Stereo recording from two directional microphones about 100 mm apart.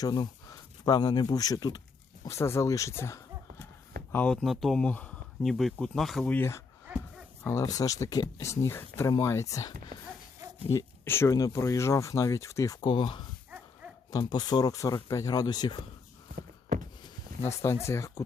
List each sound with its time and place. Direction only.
0.0 s speech: 40° left (ahead or behind)
2.2 s speech: 25° left (ahead or behind)
4.1 s speech: 15° left (ahead or behind)
4.4 s speech: centre (ahead or behind)
4.8 s speech: 15° left (ahead or behind)
6.3 s speech: 25° left (ahead or behind)
6.9 s dog: 20° right (ahead or behind)
7.6 s speech: 35° left (ahead or behind)
12.8 s speech: 55° left (ahead or behind)
14.3 s speech: 45° left (ahead or behind)
17.4 s speech: 30° left (ahead or behind)